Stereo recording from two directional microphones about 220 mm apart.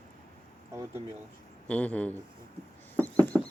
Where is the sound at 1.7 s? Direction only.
5° left (ahead or behind).